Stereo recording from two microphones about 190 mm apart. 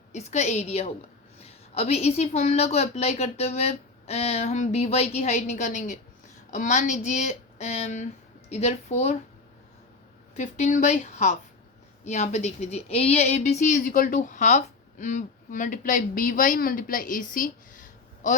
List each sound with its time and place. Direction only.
0.1 s a woman's voice: 35° left (ahead or behind)
10.3 s a woman's voice: 40° left (ahead or behind)